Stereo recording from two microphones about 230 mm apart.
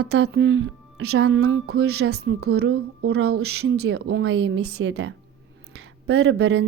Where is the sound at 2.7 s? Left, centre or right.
Right.